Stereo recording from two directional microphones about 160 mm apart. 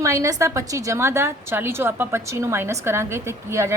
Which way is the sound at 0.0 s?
20° right (ahead or behind).